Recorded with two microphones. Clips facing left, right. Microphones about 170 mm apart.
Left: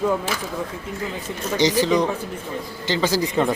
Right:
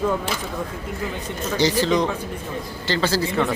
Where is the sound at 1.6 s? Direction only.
15° left (ahead or behind).